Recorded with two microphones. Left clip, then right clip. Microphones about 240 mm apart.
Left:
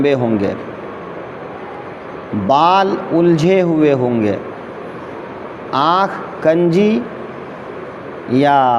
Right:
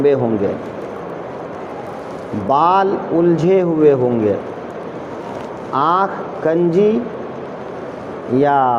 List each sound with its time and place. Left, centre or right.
0.0 s a man's voice: left
2.5 s a man's voice: left
5.7 s a man's voice: left
8.4 s a man's voice: left